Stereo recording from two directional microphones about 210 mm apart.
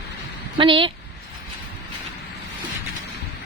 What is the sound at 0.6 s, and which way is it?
Speech, 25° right (ahead or behind).